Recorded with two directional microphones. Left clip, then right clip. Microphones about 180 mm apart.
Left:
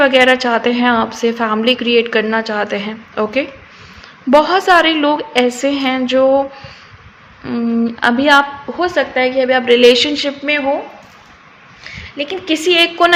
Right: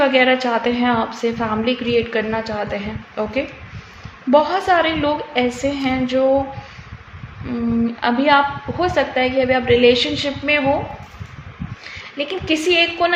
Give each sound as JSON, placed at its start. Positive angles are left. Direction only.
{"t": 0.0, "sound": "a woman's voice", "side_deg": 30}
{"t": 7.4, "sound": "a woman's voice", "side_deg": 35}
{"t": 11.9, "sound": "a woman's voice", "side_deg": 15}